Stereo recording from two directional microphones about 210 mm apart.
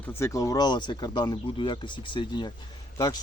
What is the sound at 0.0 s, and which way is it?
Speech, 10° left (ahead or behind).